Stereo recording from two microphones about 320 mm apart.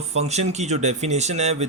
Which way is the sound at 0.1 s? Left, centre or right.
Centre.